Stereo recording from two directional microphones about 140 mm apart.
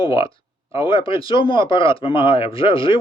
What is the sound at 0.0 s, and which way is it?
Speech, 40° left (ahead or behind).